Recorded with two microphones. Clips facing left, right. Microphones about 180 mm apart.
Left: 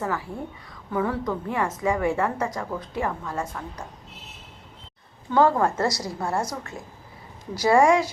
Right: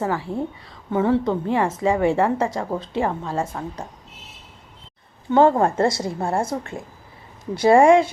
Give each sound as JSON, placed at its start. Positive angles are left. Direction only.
{"t": 0.0, "sound": "a woman's voice", "side_deg": -30}
{"t": 5.3, "sound": "a woman's voice", "side_deg": -25}
{"t": 7.5, "sound": "a woman's voice", "side_deg": -25}